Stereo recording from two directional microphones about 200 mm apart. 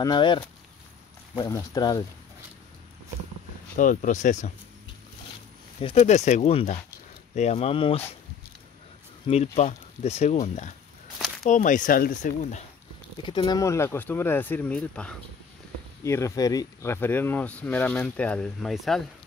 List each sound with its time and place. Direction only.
0.0 s speech: 25° left (ahead or behind)
1.4 s speech: 15° left (ahead or behind)
3.7 s speech: 40° left (ahead or behind)
5.8 s speech: 30° left (ahead or behind)
9.3 s speech: 35° left (ahead or behind)
11.1 s a sound: centre (ahead or behind)
11.5 s speech: 40° left (ahead or behind)
13.2 s speech: 25° left (ahead or behind); by 19.0 s centre (ahead or behind)